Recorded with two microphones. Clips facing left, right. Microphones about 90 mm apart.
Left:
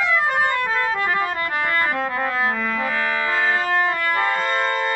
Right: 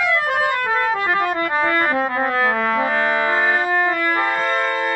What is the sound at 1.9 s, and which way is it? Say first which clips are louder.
Music: right 4 dB; 20° right (ahead or behind).